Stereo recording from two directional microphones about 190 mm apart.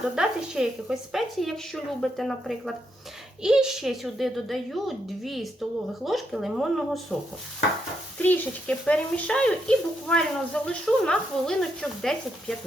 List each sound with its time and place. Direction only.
0.2 s speech: 5° right (ahead or behind)
8.2 s speech: 10° left (ahead or behind)